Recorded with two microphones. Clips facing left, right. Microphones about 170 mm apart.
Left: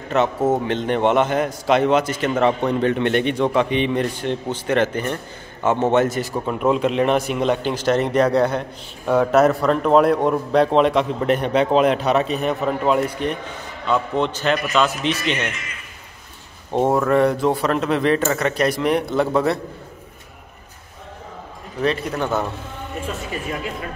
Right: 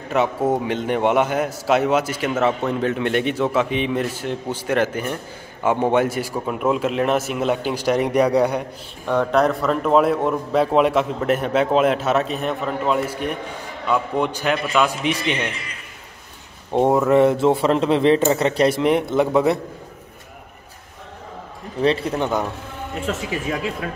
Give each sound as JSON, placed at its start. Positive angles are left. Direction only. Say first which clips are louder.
{"t": 0.1, "sound": "a man's voice", "louder": "left 1 dB", "side_deg": -10}
{"t": 9.0, "sound": "a man's voice", "louder": "left 3 dB", "side_deg": 5}
{"t": 16.7, "sound": "speech", "louder": "right 2 dB", "side_deg": -15}
{"t": 21.8, "sound": "speech", "louder": "right 2 dB", "side_deg": -30}